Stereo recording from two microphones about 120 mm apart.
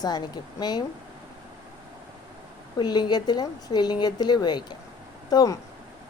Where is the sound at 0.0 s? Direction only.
35° left (ahead or behind).